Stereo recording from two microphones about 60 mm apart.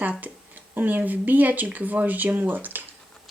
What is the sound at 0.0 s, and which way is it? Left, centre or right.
Speech, right.